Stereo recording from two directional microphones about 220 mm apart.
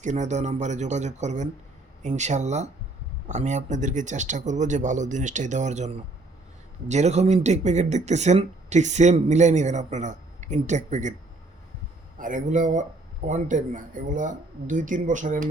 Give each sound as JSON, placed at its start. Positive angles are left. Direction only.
{"t": 0.0, "sound": "speech", "side_deg": -35}
{"t": 12.2, "sound": "speech", "side_deg": -35}